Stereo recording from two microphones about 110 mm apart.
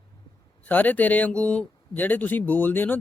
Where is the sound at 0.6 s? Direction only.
15° left (ahead or behind).